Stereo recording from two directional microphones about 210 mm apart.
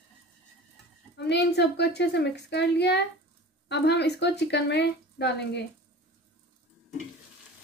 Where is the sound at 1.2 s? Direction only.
55° left (ahead or behind).